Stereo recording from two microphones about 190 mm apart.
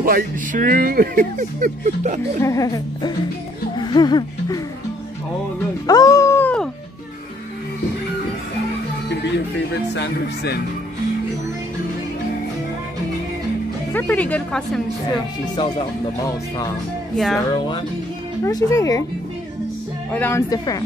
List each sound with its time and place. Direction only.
0.0 s speech: 45° right (ahead or behind)
2.4 s a woman's voice: 15° left (ahead or behind)
3.7 s music: 25° left (ahead or behind)
5.9 s music: 20° left (ahead or behind)
9.9 s speech: 60° left (ahead or behind)
13.9 s a woman's voice: 5° left (ahead or behind)
15.5 s a woman's voice: 25° left (ahead or behind)
20.1 s a woman's voice: 10° left (ahead or behind)